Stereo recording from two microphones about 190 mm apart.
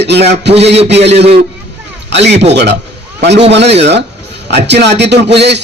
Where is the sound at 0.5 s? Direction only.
35° right (ahead or behind).